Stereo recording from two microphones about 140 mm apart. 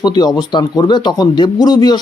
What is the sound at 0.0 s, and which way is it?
A man's voice, 30° left (ahead or behind).